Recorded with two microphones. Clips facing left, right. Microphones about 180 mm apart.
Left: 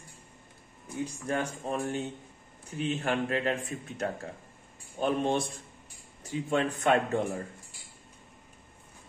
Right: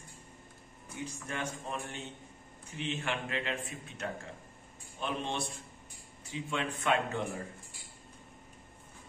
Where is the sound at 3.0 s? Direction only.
45° left (ahead or behind).